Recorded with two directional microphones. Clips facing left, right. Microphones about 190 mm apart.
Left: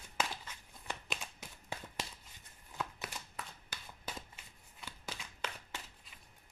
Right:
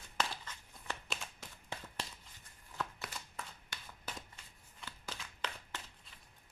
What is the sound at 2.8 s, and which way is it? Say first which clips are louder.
Shuffling cards: even; 5° left (ahead or behind).